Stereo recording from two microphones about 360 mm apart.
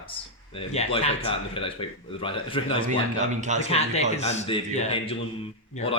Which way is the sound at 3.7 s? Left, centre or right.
Centre.